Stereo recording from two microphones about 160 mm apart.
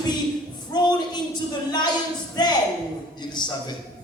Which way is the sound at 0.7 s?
25° left (ahead or behind).